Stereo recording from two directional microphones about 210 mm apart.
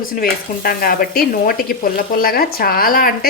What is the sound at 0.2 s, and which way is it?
Speech, 45° left (ahead or behind).